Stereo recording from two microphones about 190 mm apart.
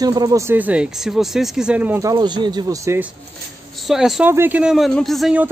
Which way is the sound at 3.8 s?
Centre (ahead or behind).